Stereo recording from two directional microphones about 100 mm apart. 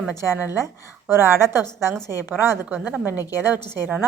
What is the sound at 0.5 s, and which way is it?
A woman's voice, 25° right (ahead or behind).